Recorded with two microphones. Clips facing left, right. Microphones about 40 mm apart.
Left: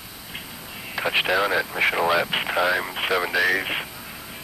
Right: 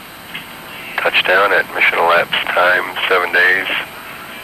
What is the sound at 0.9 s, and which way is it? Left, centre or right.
Speech, right.